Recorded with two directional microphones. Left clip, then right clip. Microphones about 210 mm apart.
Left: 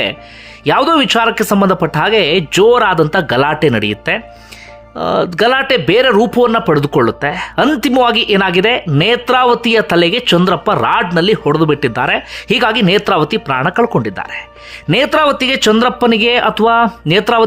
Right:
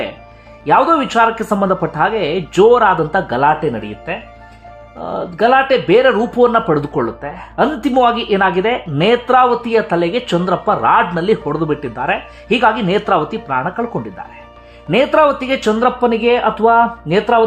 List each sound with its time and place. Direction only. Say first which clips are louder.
0.6 s speech: left 1 dB; 25° left (ahead or behind)